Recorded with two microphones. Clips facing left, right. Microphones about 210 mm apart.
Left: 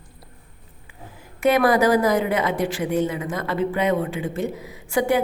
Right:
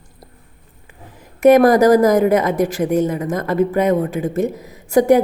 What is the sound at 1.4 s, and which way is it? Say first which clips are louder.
A woman's voice: right 7 dB; 45° right (ahead or behind).